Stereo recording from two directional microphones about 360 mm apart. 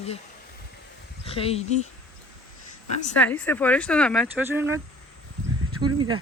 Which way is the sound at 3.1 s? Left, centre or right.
Centre.